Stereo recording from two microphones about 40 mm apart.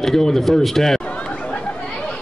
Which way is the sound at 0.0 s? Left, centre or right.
Centre.